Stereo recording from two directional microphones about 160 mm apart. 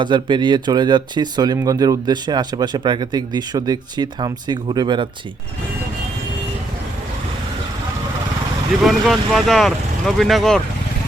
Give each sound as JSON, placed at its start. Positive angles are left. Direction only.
{"t": 0.0, "sound": "speech", "side_deg": -30}
{"t": 8.8, "sound": "speech", "side_deg": 0}